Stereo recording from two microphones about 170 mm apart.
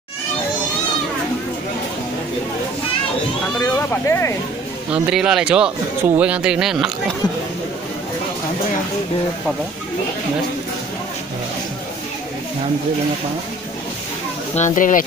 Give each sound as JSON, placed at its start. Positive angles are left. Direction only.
{"t": 3.6, "sound": "speech", "side_deg": 15}
{"t": 4.9, "sound": "speech", "side_deg": -5}
{"t": 14.5, "sound": "speech", "side_deg": 45}